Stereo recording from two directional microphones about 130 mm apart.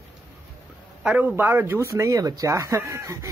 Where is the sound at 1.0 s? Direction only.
10° right (ahead or behind).